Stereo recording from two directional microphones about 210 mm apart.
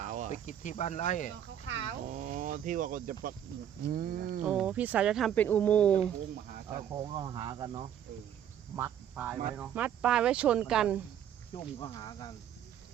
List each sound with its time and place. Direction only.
0.0 s cricket: 35° right (ahead or behind)
0.4 s cricket: 35° left (ahead or behind)
2.0 s speech: 35° right (ahead or behind)
3.8 s roaring cats: 45° right (ahead or behind)
4.4 s speech: 5° right (ahead or behind)
6.9 s cricket: 20° right (ahead or behind)
8.7 s speech: 10° right (ahead or behind)
11.5 s speech: 20° left (ahead or behind)